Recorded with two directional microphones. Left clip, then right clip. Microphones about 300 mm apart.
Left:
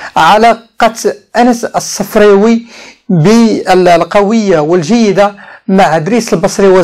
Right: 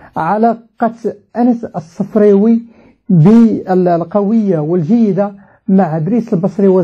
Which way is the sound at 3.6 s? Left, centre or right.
Centre.